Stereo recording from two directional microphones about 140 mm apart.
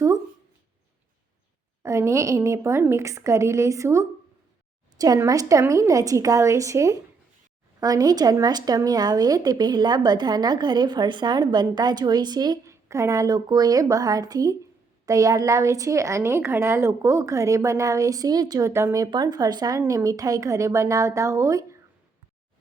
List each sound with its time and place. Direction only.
1.8 s speech: 20° right (ahead or behind)